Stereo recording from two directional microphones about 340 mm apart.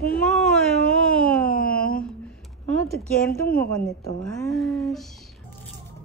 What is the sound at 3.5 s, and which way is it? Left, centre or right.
A woman's voice, centre.